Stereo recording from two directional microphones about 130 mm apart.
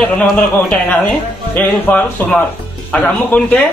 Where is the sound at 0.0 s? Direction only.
10° left (ahead or behind).